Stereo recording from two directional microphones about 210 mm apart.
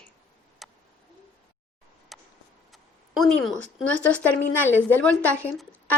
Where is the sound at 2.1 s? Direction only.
Centre (ahead or behind).